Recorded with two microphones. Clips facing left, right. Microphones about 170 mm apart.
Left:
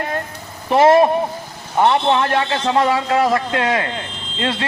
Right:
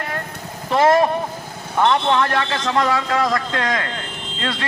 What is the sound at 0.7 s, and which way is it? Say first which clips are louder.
A man's voice: left 3 dB; 15° left (ahead or behind).